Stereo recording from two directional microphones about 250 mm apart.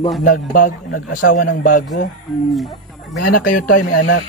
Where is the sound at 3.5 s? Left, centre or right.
Left.